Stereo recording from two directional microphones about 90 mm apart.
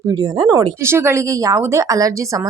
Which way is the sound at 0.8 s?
30° right (ahead or behind).